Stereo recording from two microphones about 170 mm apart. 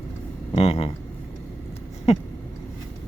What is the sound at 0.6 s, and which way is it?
Speech, 35° left (ahead or behind).